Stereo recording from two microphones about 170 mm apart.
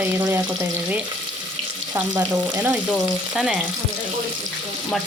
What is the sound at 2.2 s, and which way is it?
Speech, 10° right (ahead or behind).